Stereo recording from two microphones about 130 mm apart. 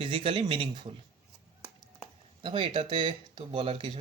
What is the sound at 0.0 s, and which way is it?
Speech, 40° right (ahead or behind).